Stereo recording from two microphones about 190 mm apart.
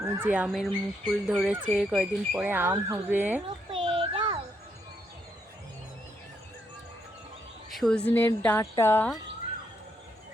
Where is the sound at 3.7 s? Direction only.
30° right (ahead or behind).